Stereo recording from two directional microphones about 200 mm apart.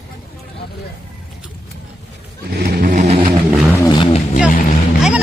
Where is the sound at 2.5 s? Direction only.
45° right (ahead or behind).